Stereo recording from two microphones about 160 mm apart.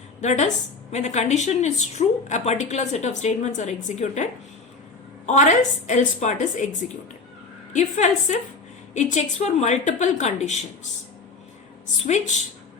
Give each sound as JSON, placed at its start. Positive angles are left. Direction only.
{"t": 0.2, "sound": "a woman's voice", "side_deg": 45}
{"t": 12.0, "sound": "a woman's voice", "side_deg": 50}